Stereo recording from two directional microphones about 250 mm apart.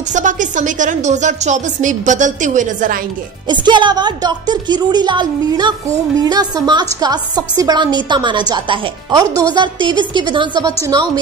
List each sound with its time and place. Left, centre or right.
0.1 s speech: right
3.4 s a woman's voice: centre